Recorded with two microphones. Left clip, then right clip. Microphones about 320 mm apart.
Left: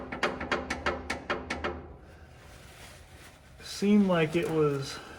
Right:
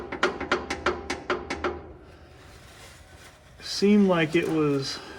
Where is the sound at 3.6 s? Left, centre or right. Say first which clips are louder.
Right 5 dB; right.